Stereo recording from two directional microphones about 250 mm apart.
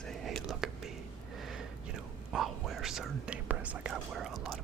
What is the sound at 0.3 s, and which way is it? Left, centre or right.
Whispering, centre.